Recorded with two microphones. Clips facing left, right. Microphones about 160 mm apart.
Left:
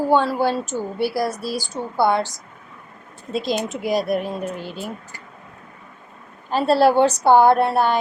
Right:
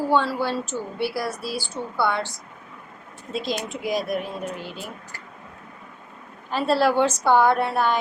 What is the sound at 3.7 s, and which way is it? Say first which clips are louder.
Speech: left 4 dB; 35° left (ahead or behind).